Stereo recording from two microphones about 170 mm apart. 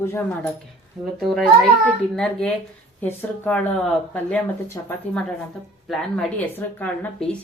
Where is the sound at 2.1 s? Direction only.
5° left (ahead or behind); by 4.9 s 20° left (ahead or behind).